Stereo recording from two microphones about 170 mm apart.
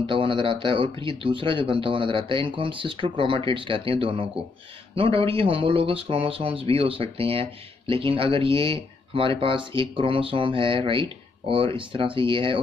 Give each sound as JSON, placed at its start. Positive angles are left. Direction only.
{"t": 0.0, "sound": "speech", "side_deg": -30}